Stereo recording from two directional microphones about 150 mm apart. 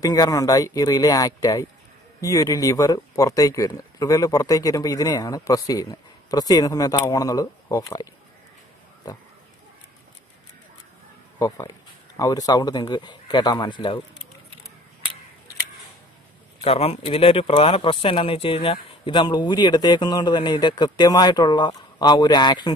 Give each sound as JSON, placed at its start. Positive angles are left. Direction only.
{"t": 0.0, "sound": "speech", "side_deg": 25}
{"t": 11.3, "sound": "speech", "side_deg": 25}
{"t": 16.6, "sound": "speech", "side_deg": 40}